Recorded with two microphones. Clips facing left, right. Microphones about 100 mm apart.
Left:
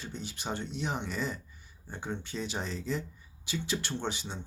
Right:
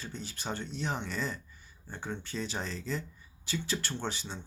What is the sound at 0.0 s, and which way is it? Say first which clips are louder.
Speech: left 1 dB; 15° left (ahead or behind).